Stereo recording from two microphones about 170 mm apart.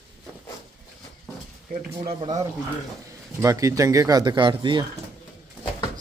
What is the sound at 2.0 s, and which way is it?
Speech, 35° right (ahead or behind).